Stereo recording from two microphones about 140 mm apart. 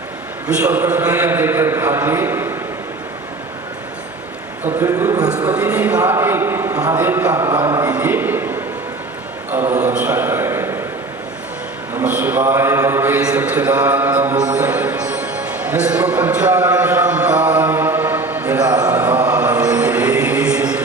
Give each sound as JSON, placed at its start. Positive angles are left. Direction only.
{"t": 0.4, "sound": "mantra", "side_deg": -10}
{"t": 4.8, "sound": "a man's voice", "side_deg": -25}
{"t": 5.3, "sound": "a sound", "side_deg": -10}
{"t": 5.7, "sound": "mantra", "side_deg": -10}
{"t": 6.0, "sound": "a man's voice", "side_deg": -15}
{"t": 7.9, "sound": "a sound", "side_deg": -15}
{"t": 11.9, "sound": "mantra", "side_deg": -10}
{"t": 13.8, "sound": "music", "side_deg": -15}
{"t": 17.6, "sound": "mantra", "side_deg": -15}